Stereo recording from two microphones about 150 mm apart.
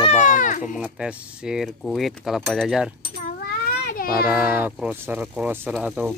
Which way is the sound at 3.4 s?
80° left.